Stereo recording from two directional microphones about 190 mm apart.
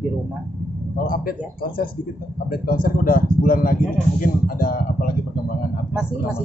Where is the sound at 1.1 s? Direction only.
50° left (ahead or behind).